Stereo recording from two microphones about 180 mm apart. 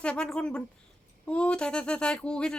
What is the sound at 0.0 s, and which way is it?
Speech, 5° left (ahead or behind).